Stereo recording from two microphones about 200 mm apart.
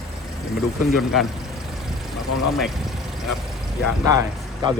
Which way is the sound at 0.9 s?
Centre (ahead or behind).